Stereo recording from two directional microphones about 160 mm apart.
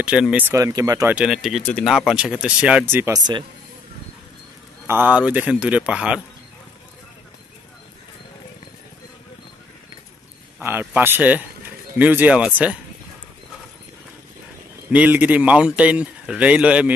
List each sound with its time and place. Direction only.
0.0 s speech: 5° right (ahead or behind)
1.1 s speech: 5° right (ahead or behind)
3.2 s speech: 25° right (ahead or behind)
4.8 s speech: 10° right (ahead or behind)
10.6 s speech: 15° right (ahead or behind)
14.9 s speech: 10° right (ahead or behind)